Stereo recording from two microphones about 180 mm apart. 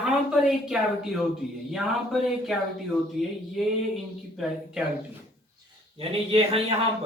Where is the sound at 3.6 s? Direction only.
Centre (ahead or behind).